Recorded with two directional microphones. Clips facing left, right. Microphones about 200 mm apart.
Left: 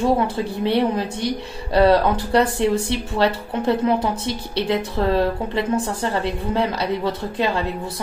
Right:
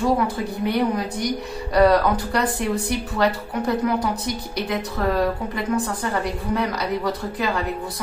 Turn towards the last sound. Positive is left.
turn(degrees=25)  # may be behind; listen again after turning